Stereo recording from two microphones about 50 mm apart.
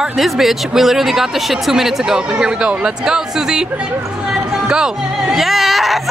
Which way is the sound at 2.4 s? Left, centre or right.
Centre.